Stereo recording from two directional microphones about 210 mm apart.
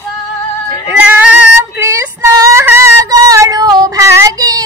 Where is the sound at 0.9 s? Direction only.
5° right (ahead or behind).